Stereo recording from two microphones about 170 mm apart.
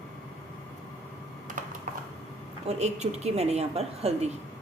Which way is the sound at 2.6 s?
40° right (ahead or behind).